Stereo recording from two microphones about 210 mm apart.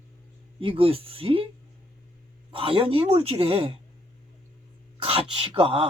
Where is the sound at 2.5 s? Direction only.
25° right (ahead or behind).